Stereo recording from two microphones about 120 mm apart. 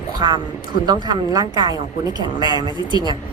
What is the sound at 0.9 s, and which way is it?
Speech, 35° right (ahead or behind).